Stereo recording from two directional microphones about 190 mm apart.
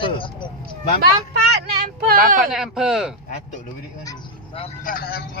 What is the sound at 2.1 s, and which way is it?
Speech, 45° right (ahead or behind).